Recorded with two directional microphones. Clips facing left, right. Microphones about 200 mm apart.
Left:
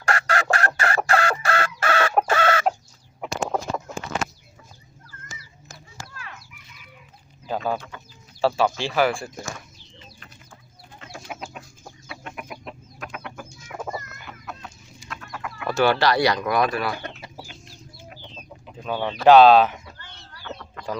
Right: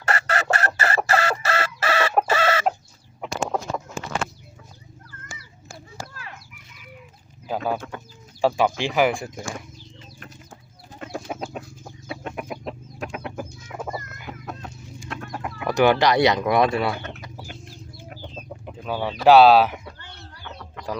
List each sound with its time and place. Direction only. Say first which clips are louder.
0.0 s chicken: left 1 dB; 5° right (ahead or behind)
7.4 s a sound: even; 10° right (ahead or behind)
7.8 s speech: right 6 dB; 50° right (ahead or behind)
8.4 s speech: right 1 dB; 15° right (ahead or behind)
10.2 s bird: right 5 dB; 40° right (ahead or behind)
11.3 s chicken: right 5 dB; 35° right (ahead or behind)
14.6 s bird: right 5 dB; 50° right (ahead or behind)
15.6 s speech: right 2 dB; 15° right (ahead or behind)
17.4 s chicken: right 5 dB; 50° right (ahead or behind)
18.8 s bird: even; 5° right (ahead or behind)
19.2 s speech: left 1 dB; 5° right (ahead or behind)